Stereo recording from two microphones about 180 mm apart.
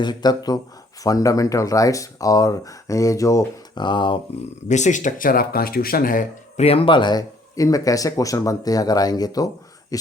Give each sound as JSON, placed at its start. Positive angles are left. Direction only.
{"t": 0.0, "sound": "speech", "side_deg": 25}
{"t": 4.7, "sound": "speech", "side_deg": 40}
{"t": 6.7, "sound": "speech", "side_deg": 30}